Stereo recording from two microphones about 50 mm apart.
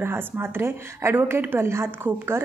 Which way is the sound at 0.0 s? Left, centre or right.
Right.